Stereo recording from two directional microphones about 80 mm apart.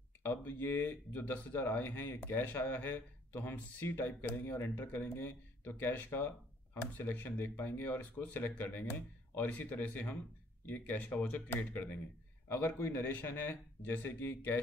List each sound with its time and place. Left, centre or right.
0.2 s speech: left